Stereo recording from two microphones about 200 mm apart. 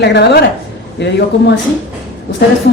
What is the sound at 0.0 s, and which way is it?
A woman's voice, 60° left (ahead or behind).